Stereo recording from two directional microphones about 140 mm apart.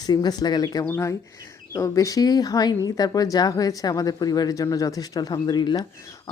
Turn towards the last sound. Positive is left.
turn(degrees=30)  # may be behind; listen again after turning